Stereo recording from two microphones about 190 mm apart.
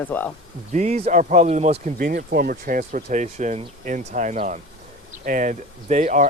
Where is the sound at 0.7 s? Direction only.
35° right (ahead or behind).